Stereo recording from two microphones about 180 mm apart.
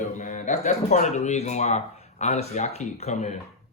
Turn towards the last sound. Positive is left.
turn(degrees=40)  # may be behind; listen again after turning